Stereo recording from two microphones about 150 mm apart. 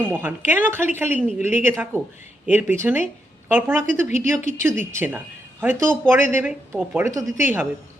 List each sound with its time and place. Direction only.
0.1 s speech: 15° right (ahead or behind)